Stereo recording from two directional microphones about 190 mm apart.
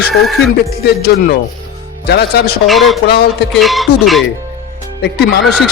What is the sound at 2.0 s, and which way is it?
Speech, 60° left (ahead or behind).